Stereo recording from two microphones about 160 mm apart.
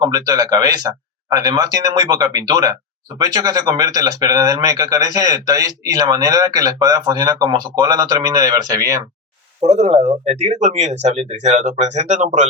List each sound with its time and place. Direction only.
0.0 s speech: 25° right (ahead or behind)
9.6 s speech: 45° right (ahead or behind)